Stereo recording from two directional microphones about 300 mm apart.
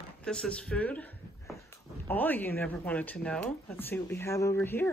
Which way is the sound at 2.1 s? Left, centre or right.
Centre.